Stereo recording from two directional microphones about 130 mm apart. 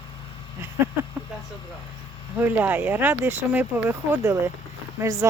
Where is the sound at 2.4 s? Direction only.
15° right (ahead or behind).